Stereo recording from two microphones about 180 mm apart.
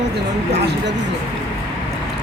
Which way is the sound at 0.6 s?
70° right (ahead or behind).